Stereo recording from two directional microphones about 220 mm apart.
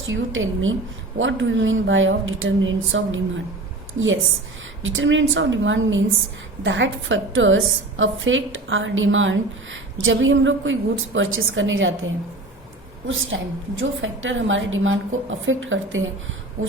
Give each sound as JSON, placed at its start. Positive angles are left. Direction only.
{"t": 0.0, "sound": "a woman's voice", "side_deg": -60}
{"t": 4.8, "sound": "a woman's voice", "side_deg": -60}